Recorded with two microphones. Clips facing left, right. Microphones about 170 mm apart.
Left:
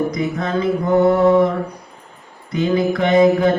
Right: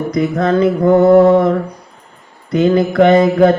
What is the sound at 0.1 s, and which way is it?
Mantra, 60° right (ahead or behind).